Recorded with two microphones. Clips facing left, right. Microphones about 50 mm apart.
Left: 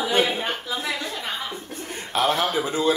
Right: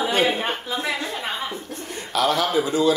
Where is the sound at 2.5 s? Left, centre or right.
Left.